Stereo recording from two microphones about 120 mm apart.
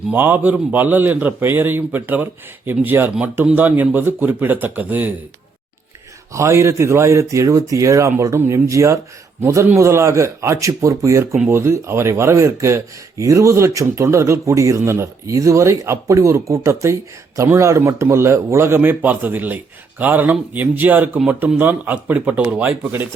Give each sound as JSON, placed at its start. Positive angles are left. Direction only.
{"t": 0.1, "sound": "speech", "side_deg": -15}
{"t": 6.3, "sound": "speech", "side_deg": -25}